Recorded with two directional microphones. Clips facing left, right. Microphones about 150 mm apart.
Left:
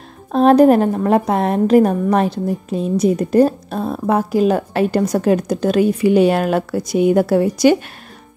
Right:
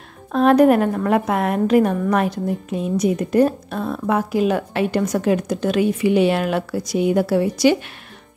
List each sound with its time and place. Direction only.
0.3 s a woman's voice: 35° left (ahead or behind)